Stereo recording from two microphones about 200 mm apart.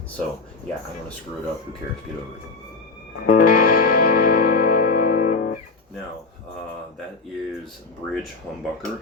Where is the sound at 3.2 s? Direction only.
45° left (ahead or behind).